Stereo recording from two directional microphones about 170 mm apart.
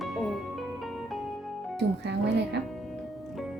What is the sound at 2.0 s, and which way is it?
Music, 80° right.